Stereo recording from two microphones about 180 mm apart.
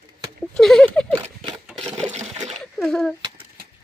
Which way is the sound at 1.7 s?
5° left (ahead or behind).